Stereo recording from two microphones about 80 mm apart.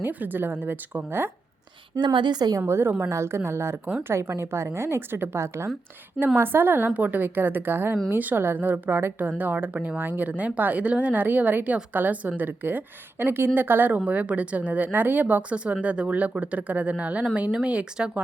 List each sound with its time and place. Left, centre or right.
0.0 s speech: right
2.0 s speech: right
2.6 s a woman's voice: right; by 18.2 s centre